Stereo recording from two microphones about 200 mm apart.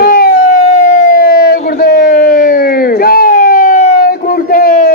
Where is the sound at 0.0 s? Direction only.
50° left (ahead or behind).